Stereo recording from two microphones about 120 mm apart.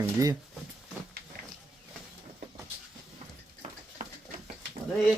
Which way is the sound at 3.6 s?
90° right.